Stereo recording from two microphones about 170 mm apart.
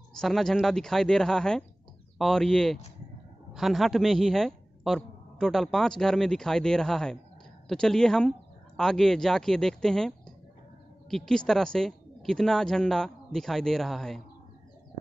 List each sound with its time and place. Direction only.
0.1 s a man's voice: centre (ahead or behind)